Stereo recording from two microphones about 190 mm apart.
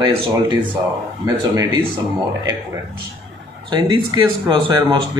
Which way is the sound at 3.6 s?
25° right (ahead or behind).